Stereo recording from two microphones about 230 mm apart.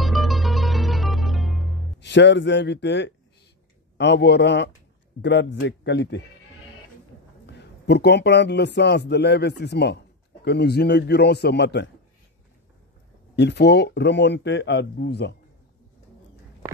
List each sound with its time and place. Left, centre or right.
0.0 s music: centre
2.0 s a man's voice: left
7.4 s a man's voice: left
13.4 s a man's voice: left